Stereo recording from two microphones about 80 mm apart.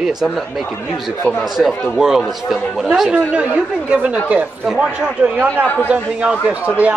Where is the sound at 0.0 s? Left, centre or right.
Centre.